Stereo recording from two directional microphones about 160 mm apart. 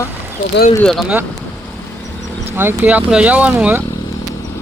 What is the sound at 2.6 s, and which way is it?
Speech, 10° right (ahead or behind).